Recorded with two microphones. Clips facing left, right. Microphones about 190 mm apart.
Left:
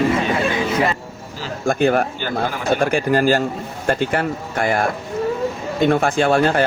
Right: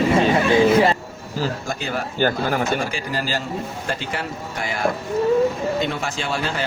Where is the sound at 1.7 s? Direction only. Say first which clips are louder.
Left 10 dB; 55° left (ahead or behind).